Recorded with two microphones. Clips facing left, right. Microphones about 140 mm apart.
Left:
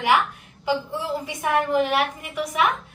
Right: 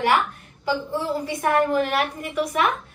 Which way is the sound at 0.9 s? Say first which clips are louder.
Right 3 dB; 45° right (ahead or behind).